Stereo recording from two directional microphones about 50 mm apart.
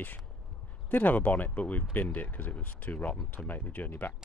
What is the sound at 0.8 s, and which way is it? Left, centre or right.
Speech, left.